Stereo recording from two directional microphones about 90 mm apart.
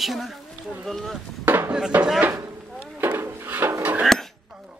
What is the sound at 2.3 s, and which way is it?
Speech, 35° right (ahead or behind).